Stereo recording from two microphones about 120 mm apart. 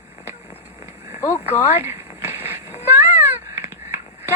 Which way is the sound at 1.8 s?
15° right (ahead or behind).